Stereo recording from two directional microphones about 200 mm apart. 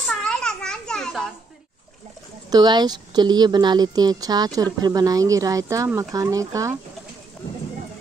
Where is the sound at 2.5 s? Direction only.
20° right (ahead or behind).